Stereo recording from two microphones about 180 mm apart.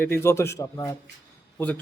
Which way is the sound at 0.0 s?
15° left (ahead or behind).